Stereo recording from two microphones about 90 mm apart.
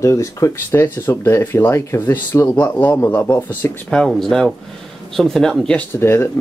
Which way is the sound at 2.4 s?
15° left (ahead or behind).